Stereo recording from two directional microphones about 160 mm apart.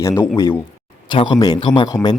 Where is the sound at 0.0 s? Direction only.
15° left (ahead or behind).